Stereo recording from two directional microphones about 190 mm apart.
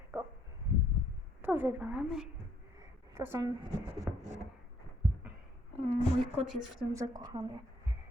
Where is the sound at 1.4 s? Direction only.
10° right (ahead or behind).